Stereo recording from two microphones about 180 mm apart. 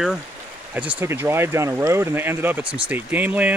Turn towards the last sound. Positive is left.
turn(degrees=-10)  # may be behind; listen again after turning